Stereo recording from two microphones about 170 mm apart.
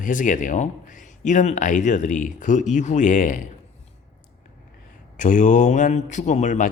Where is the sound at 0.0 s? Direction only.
50° left (ahead or behind).